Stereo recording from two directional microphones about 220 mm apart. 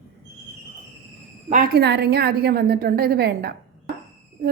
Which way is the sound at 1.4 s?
35° right (ahead or behind).